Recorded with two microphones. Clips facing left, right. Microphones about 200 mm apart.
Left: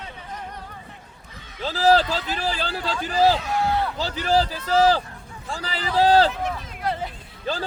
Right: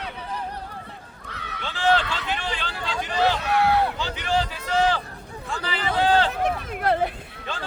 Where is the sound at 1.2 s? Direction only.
70° right (ahead or behind).